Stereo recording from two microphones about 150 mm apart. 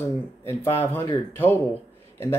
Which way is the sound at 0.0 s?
15° left (ahead or behind).